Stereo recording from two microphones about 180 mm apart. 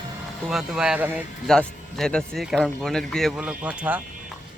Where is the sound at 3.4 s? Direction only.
10° right (ahead or behind).